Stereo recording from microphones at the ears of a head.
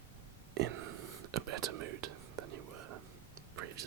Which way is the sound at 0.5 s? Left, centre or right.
Right.